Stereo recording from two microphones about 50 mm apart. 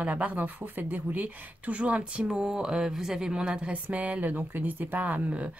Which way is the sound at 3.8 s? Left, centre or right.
Right.